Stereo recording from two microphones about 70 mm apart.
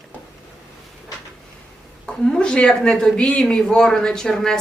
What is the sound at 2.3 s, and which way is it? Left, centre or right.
Speech, centre.